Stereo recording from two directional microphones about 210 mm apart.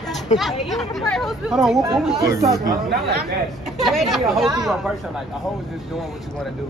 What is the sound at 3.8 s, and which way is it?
Speech, centre (ahead or behind).